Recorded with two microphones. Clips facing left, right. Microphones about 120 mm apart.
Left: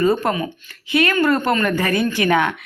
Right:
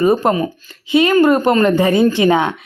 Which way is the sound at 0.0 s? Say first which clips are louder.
Right 4 dB; 25° right (ahead or behind).